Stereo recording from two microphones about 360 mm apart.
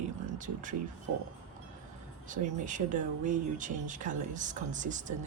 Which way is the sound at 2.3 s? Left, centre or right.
Right.